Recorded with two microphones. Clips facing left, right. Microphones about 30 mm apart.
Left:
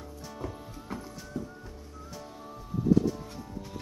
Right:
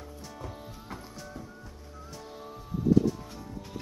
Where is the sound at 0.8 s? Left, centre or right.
Centre.